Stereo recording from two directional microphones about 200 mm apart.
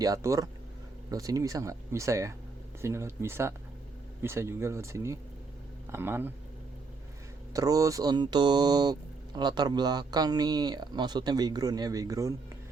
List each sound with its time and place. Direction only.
0.0 s speech: 15° right (ahead or behind)
7.5 s speech: 15° right (ahead or behind)